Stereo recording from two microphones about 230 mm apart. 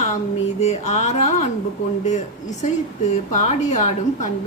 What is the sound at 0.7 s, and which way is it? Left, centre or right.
A woman's voice, left.